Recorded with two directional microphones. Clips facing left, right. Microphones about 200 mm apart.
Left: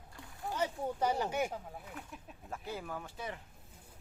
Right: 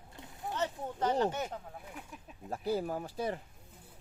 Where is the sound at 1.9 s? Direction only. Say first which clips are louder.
Even; centre (ahead or behind).